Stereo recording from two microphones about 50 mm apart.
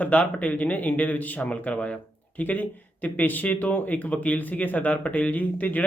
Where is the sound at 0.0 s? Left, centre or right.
Left.